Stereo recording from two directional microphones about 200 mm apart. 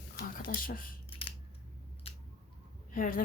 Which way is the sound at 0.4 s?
45° left (ahead or behind).